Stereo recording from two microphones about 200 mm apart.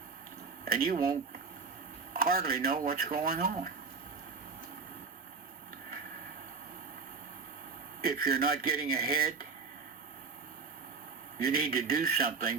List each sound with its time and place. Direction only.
0.6 s speech: 45° right (ahead or behind)
2.1 s speech: 45° right (ahead or behind)
8.0 s speech: 50° right (ahead or behind)
11.3 s speech: 45° right (ahead or behind)